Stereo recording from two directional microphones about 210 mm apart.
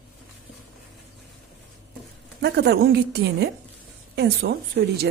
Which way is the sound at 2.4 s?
50° right (ahead or behind).